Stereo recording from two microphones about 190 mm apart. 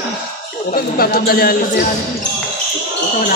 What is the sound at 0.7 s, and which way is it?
Speech, 55° left (ahead or behind).